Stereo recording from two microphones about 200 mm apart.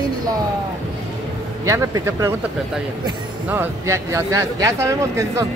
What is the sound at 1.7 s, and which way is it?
Speech, 15° right (ahead or behind).